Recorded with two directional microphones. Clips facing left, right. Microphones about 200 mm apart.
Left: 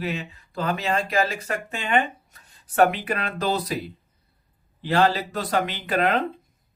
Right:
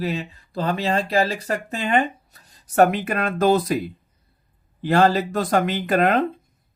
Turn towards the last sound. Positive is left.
turn(degrees=-45)  # may be behind; listen again after turning